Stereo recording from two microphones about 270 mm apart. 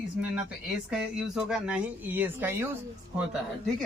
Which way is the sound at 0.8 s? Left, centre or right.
Centre.